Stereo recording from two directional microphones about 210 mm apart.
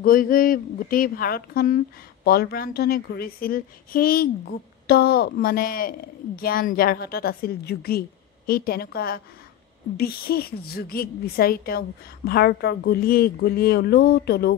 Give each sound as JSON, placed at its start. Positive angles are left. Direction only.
{"t": 0.0, "sound": "a woman's voice", "side_deg": 40}